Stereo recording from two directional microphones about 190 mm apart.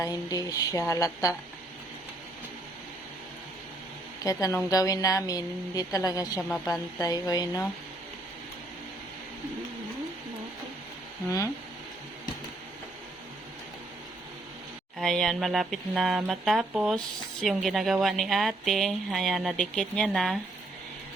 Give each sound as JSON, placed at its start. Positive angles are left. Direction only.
{"t": 0.0, "sound": "speech", "side_deg": 20}
{"t": 4.2, "sound": "a woman's voice", "side_deg": 20}
{"t": 6.5, "sound": "speech", "side_deg": 0}
{"t": 7.0, "sound": "a woman's voice", "side_deg": 20}
{"t": 14.9, "sound": "speech", "side_deg": 0}